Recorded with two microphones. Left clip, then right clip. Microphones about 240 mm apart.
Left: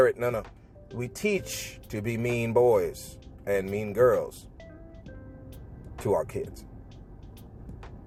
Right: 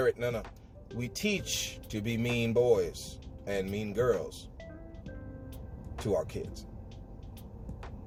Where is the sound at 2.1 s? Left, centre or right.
Left.